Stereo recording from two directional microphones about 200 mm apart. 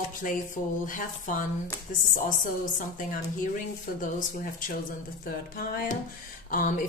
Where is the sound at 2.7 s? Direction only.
40° left (ahead or behind).